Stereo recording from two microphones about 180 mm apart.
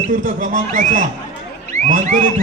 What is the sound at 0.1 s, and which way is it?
A man's voice, 45° right (ahead or behind).